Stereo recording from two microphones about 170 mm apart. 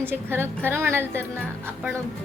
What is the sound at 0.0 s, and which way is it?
Speech, 15° right (ahead or behind).